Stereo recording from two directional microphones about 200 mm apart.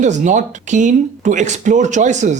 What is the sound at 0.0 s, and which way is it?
Speech, 35° right (ahead or behind).